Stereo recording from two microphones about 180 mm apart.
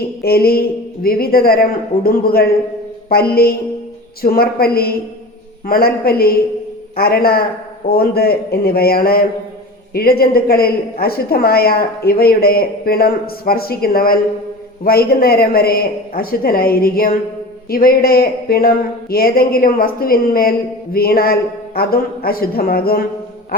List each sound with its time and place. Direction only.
0.2 s music: 60° left (ahead or behind)
1.0 s speech: 55° left (ahead or behind)